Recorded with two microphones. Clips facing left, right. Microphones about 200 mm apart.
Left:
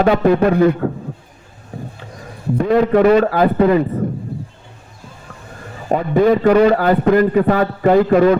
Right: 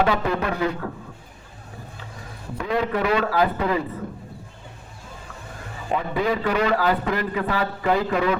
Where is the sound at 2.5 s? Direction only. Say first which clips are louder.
Left 11 dB; 50° left (ahead or behind).